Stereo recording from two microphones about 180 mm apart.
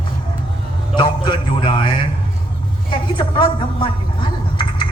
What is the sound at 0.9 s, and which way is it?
Music, 25° left (ahead or behind).